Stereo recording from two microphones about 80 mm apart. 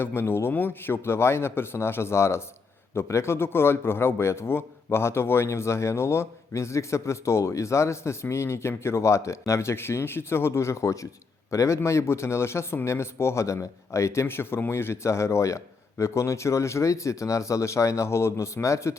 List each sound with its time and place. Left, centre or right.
0.0 s a man's voice: left